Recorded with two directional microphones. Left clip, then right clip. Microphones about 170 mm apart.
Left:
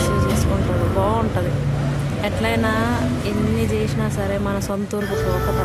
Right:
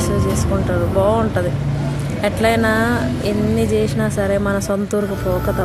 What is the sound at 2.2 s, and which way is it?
Speech, 20° right (ahead or behind).